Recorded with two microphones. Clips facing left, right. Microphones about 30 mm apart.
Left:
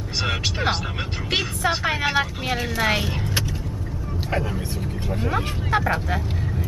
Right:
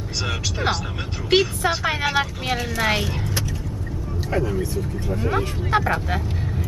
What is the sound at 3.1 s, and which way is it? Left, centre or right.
Speech, centre.